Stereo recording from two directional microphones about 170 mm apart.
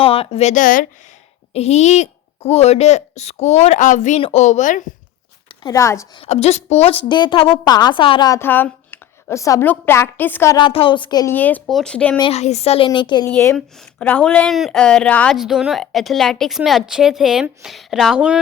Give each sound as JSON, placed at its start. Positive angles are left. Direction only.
{"t": 0.0, "sound": "a woman's voice", "side_deg": 35}
{"t": 1.5, "sound": "a woman's voice", "side_deg": 40}
{"t": 5.6, "sound": "a woman's voice", "side_deg": 20}
{"t": 6.1, "sound": "a woman's voice", "side_deg": 40}
{"t": 8.4, "sound": "a woman's voice", "side_deg": 10}
{"t": 10.6, "sound": "speech", "side_deg": 30}
{"t": 11.3, "sound": "a woman's voice", "side_deg": 10}
{"t": 12.3, "sound": "a woman's voice", "side_deg": 40}
{"t": 13.2, "sound": "a woman's voice", "side_deg": 15}